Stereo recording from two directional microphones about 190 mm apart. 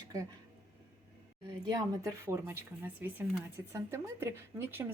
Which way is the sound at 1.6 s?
15° right (ahead or behind).